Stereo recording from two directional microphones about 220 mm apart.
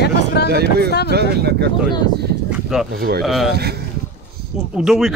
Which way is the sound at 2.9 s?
45° right (ahead or behind).